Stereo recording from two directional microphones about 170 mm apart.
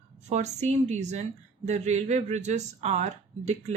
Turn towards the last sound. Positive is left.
turn(degrees=-40)  # may be behind; listen again after turning